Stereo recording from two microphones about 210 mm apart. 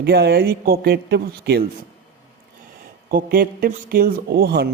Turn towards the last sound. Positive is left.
turn(degrees=-50)  # may be behind; listen again after turning